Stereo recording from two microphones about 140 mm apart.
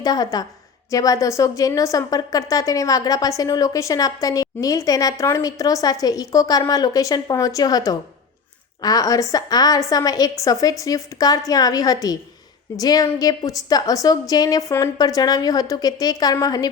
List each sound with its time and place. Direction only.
0.0 s a woman's voice: 25° left (ahead or behind)